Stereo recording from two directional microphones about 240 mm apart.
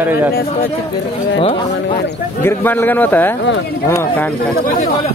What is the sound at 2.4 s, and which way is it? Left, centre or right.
A man's voice, centre.